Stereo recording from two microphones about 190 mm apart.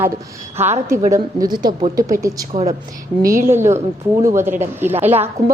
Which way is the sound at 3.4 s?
15° right (ahead or behind).